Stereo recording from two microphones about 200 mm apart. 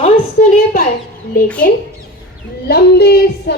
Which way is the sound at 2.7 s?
50° left (ahead or behind).